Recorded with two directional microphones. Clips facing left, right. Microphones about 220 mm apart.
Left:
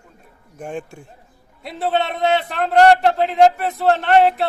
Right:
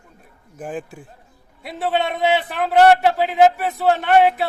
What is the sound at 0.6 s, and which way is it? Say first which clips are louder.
A man's voice: even; 5° right (ahead or behind).